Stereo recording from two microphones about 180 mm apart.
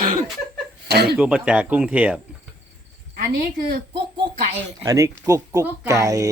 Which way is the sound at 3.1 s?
60° right (ahead or behind).